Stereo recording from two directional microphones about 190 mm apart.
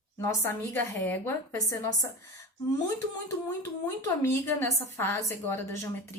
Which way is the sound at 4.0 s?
15° left (ahead or behind).